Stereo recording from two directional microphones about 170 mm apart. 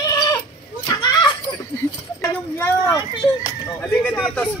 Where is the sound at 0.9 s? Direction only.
25° left (ahead or behind).